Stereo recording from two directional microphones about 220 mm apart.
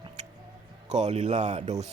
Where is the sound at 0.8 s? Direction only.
30° right (ahead or behind).